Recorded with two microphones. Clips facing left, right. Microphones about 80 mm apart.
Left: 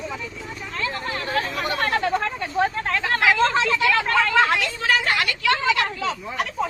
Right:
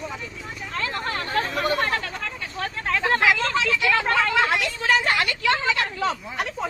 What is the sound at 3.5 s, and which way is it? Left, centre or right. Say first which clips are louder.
Speech: left 2 dB; left.